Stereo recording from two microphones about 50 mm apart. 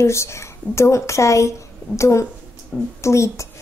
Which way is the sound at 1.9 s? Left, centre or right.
Left.